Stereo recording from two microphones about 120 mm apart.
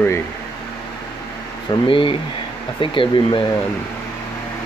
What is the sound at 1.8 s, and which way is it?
Speech, 45° left (ahead or behind).